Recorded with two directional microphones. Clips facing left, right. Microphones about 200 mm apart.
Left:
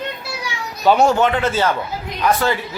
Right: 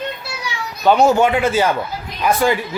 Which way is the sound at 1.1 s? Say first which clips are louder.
Right 2 dB; 10° right (ahead or behind).